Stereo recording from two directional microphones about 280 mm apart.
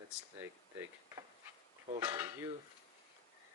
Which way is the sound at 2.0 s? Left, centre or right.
Centre.